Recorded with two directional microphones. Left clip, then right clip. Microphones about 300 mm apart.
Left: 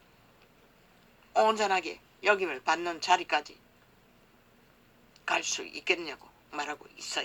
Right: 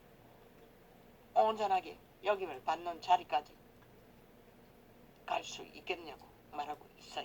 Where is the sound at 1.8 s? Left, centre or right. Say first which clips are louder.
Left 5 dB; left.